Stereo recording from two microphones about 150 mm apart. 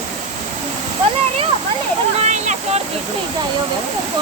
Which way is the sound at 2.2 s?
50° right (ahead or behind).